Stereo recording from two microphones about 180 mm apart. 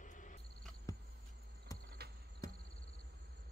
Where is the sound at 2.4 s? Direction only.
20° left (ahead or behind).